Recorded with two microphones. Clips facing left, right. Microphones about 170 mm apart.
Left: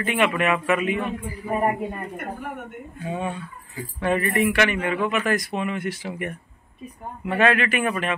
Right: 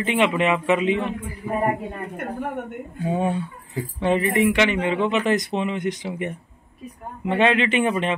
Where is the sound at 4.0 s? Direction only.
20° right (ahead or behind).